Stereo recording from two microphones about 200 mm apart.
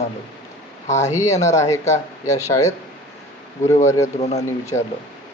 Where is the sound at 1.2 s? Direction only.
15° left (ahead or behind).